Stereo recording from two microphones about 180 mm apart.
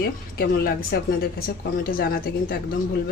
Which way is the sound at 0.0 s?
60° left (ahead or behind).